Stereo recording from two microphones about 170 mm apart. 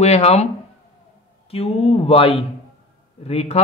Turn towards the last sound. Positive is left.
turn(degrees=35)  # may be behind; listen again after turning